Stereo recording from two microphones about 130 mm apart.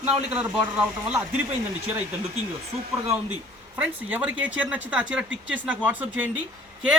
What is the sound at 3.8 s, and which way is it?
Speech, 10° right (ahead or behind).